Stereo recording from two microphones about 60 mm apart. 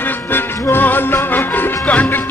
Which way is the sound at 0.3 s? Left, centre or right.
Left.